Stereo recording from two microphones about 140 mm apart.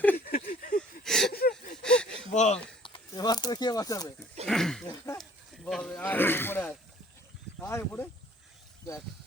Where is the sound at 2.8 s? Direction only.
35° left (ahead or behind).